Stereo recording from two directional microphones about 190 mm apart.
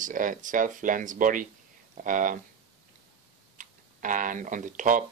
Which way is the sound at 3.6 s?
45° right (ahead or behind).